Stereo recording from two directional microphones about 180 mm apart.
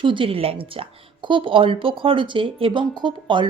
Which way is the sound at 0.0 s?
30° right (ahead or behind).